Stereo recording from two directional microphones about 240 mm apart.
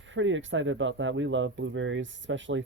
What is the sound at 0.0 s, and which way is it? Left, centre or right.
Speech, right.